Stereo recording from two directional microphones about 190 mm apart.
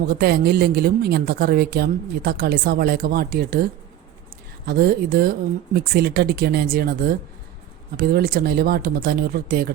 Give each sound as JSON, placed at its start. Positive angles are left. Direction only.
{"t": 0.0, "sound": "speech", "side_deg": -55}